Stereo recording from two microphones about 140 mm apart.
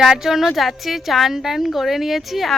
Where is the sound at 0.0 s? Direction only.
5° right (ahead or behind).